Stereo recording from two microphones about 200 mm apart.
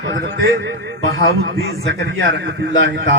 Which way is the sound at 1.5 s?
55° right (ahead or behind).